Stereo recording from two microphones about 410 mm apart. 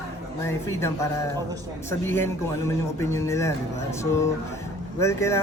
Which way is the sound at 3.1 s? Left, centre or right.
Centre.